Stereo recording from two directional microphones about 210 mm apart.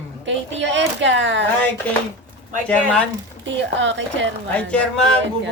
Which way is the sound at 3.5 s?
60° right (ahead or behind).